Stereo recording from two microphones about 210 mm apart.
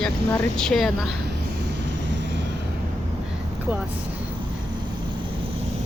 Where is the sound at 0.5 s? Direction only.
Centre (ahead or behind).